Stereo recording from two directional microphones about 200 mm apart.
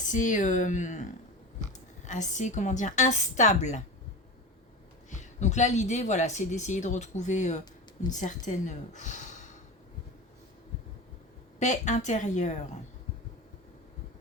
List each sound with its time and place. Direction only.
0.0 s speech: 40° left (ahead or behind)
5.1 s speech: 35° left (ahead or behind)
11.6 s speech: 35° left (ahead or behind)